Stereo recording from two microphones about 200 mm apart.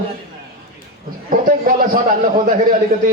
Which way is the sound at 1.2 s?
45° right (ahead or behind).